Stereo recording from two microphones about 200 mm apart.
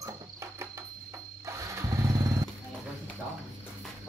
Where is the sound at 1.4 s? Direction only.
15° right (ahead or behind).